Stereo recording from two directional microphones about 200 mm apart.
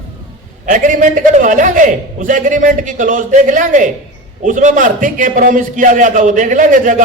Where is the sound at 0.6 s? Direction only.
40° right (ahead or behind).